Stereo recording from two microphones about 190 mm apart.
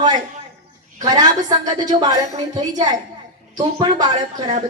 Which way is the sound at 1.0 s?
20° right (ahead or behind).